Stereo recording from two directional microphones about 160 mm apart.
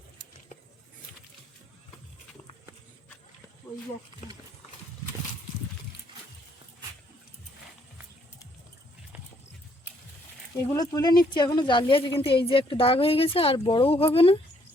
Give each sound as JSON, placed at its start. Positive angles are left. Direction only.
{"t": 10.7, "sound": "a woman's voice", "side_deg": 20}